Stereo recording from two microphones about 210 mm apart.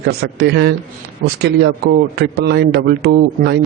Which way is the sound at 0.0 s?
50° right (ahead or behind).